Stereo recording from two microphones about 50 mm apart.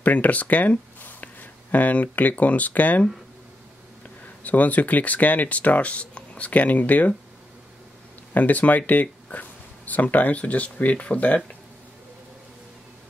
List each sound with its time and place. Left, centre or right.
0.0 s speech: left
4.4 s speech: left
8.3 s speech: left